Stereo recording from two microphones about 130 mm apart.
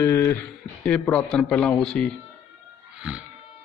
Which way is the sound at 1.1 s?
10° left (ahead or behind).